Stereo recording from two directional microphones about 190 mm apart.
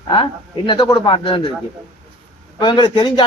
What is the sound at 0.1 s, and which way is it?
Speech, 25° left (ahead or behind).